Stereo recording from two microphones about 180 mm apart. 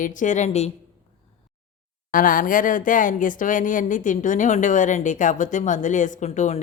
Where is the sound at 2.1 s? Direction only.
50° left (ahead or behind).